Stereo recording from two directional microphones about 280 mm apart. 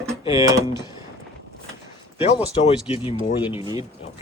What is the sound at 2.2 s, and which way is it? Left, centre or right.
Speech, left.